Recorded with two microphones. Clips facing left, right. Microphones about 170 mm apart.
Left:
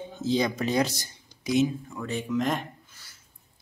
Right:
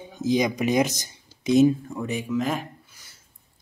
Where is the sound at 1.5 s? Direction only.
45° right (ahead or behind).